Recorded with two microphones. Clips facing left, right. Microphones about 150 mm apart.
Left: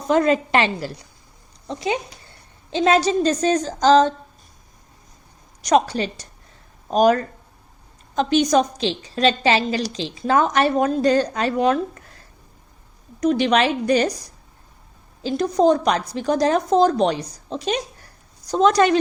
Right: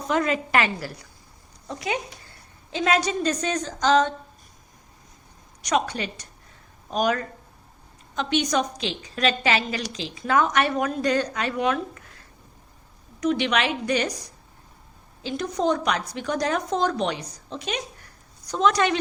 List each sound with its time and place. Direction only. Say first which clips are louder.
0.1 s a woman's voice: left 6 dB; 35° left (ahead or behind)
5.6 s a woman's voice: left 6 dB; 35° left (ahead or behind)
13.1 s a woman's voice: left 5 dB; 40° left (ahead or behind)
15.2 s a woman's voice: left 8 dB; 35° left (ahead or behind)